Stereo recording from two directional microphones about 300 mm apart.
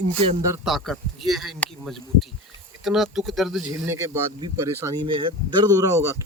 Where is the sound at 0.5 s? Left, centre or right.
Centre.